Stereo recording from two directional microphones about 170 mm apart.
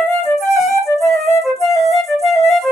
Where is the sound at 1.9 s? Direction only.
Centre (ahead or behind).